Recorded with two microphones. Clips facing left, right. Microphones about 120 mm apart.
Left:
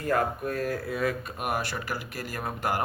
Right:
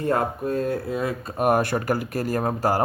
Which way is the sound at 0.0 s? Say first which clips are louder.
Right 3 dB; 30° right (ahead or behind).